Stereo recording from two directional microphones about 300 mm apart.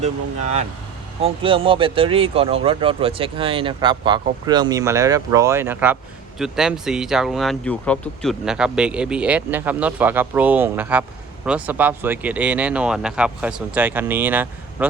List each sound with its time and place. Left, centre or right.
1.2 s speech: centre